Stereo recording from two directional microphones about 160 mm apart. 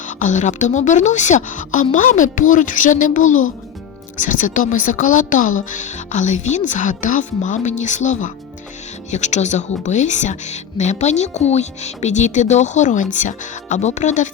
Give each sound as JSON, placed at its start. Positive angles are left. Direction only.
{"t": 0.0, "sound": "speech", "side_deg": 50}